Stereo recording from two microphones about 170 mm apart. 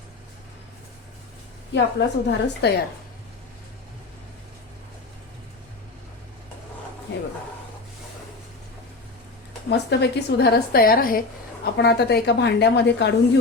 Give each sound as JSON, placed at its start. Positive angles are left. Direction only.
{"t": 1.7, "sound": "a woman's voice", "side_deg": 90}
{"t": 9.6, "sound": "a woman's voice", "side_deg": 80}
{"t": 11.6, "sound": "speech", "side_deg": 75}